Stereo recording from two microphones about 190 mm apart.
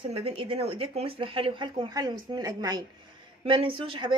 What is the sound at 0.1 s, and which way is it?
A woman's voice, 30° right (ahead or behind).